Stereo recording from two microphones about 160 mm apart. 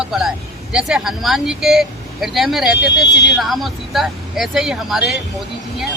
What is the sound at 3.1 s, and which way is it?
Speech, 90° left.